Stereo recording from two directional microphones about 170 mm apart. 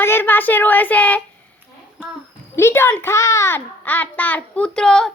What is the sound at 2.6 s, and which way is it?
A child's voice, 15° left (ahead or behind).